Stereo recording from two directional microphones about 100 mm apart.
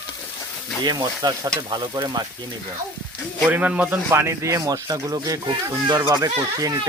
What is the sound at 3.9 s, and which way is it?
Speech, 25° right (ahead or behind).